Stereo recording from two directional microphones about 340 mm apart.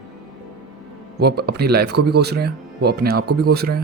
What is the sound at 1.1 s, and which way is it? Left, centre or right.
Speech, right.